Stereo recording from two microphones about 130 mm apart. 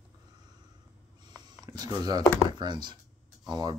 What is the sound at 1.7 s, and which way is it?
Speech, 30° right (ahead or behind).